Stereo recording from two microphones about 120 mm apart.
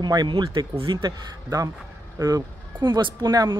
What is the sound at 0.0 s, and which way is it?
Speech, 35° right (ahead or behind).